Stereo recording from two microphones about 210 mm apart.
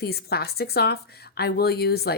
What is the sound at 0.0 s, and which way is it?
Speech, 50° left (ahead or behind).